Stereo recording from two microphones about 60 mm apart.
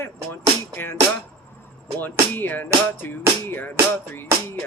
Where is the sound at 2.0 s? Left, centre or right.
Left.